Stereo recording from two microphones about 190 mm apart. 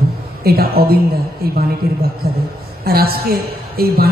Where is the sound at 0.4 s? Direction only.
55° right (ahead or behind).